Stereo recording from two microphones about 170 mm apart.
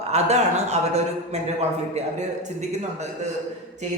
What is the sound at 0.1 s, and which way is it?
Speech, 40° right (ahead or behind).